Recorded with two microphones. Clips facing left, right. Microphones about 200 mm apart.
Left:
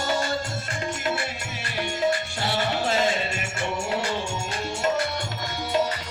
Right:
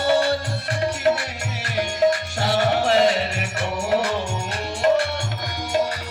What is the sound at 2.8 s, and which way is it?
Music, 70° right (ahead or behind).